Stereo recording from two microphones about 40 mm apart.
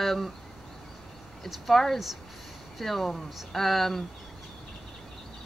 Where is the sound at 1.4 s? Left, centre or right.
Centre.